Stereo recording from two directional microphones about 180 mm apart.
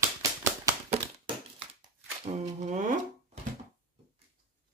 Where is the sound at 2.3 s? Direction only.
40° right (ahead or behind).